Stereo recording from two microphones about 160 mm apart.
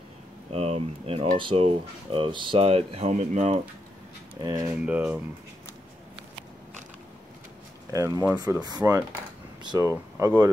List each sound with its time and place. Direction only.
0.5 s speech: 40° right (ahead or behind)
4.4 s speech: 25° right (ahead or behind)
4.7 s speech: 10° right (ahead or behind)
7.9 s speech: 20° right (ahead or behind)